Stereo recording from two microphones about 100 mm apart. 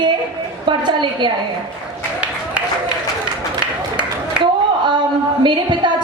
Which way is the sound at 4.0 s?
50° right (ahead or behind).